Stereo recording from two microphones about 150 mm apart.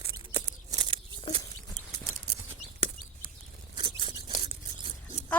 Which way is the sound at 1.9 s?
40° right (ahead or behind).